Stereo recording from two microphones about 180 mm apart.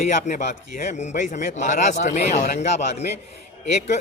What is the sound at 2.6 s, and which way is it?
Speech, 40° left (ahead or behind).